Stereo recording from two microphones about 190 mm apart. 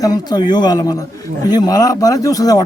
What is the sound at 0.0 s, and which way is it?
A man's voice, 20° left (ahead or behind).